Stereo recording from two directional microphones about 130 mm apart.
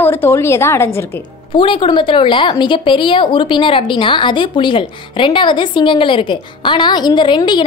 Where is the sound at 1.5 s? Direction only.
40° left (ahead or behind).